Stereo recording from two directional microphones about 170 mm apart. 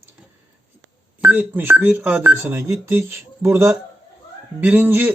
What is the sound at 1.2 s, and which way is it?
A man's voice, 10° right (ahead or behind).